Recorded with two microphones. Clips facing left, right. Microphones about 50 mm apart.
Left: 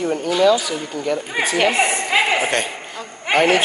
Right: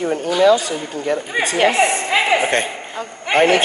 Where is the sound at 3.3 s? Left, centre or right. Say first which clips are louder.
Right 2 dB; right.